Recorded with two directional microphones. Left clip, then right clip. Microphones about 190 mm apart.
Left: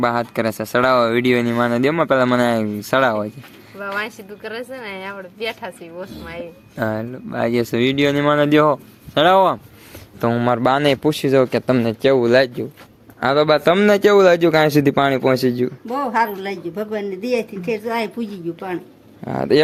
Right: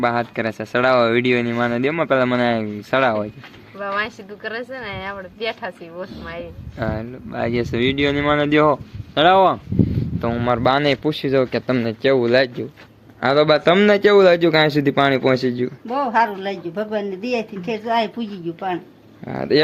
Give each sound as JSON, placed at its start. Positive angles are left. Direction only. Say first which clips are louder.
{"t": 0.0, "sound": "speech", "louder": "left 1 dB", "side_deg": 25}
{"t": 3.8, "sound": "a woman's voice", "louder": "right 1 dB", "side_deg": 10}
{"t": 6.7, "sound": "speech", "louder": "left 3 dB", "side_deg": 25}
{"t": 15.9, "sound": "a woman's voice", "louder": "right 2 dB", "side_deg": 10}
{"t": 19.2, "sound": "speech", "louder": "left 2 dB", "side_deg": 25}